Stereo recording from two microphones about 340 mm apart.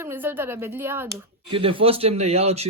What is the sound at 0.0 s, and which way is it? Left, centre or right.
Speech, centre.